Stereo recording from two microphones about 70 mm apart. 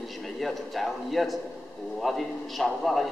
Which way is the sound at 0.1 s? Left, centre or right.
Centre.